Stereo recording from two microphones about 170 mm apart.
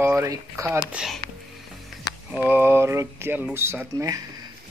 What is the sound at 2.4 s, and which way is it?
Speech, 10° right (ahead or behind).